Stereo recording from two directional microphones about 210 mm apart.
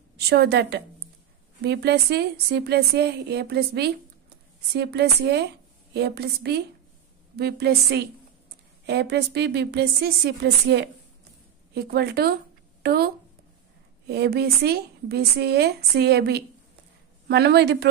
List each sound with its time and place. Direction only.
0.3 s a woman's voice: 50° right (ahead or behind)